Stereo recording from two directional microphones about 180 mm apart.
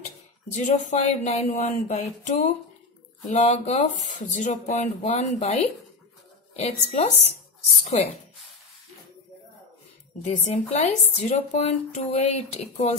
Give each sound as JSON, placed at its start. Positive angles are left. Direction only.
{"t": 0.0, "sound": "speech", "side_deg": 40}
{"t": 10.2, "sound": "speech", "side_deg": 40}